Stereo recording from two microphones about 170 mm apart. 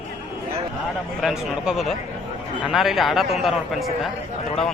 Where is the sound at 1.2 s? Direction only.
Centre (ahead or behind).